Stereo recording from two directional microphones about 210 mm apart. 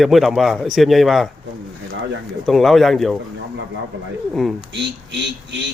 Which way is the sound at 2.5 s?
Centre (ahead or behind).